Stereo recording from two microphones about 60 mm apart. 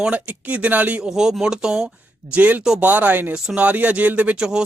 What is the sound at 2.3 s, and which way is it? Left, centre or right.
Speech, right.